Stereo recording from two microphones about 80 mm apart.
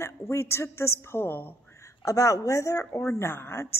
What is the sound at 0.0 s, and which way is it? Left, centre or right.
A woman's voice, left.